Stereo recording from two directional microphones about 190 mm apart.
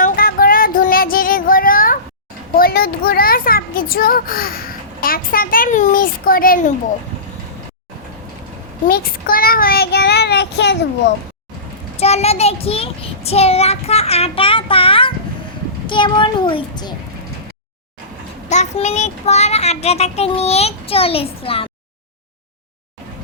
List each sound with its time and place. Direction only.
0.0 s child singing: 50° left (ahead or behind)
2.6 s a child's voice: 50° left (ahead or behind)
8.9 s speech: 50° left (ahead or behind)
11.9 s child singing: 35° left (ahead or behind)
15.9 s a child's voice: 25° left (ahead or behind)
18.4 s a child's voice: 40° left (ahead or behind)